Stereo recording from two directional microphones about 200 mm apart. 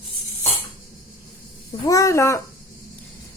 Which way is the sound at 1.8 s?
15° left (ahead or behind).